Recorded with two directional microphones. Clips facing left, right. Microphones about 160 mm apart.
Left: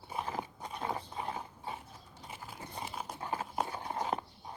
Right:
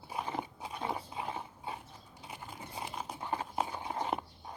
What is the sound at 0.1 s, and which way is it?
Dog, centre (ahead or behind).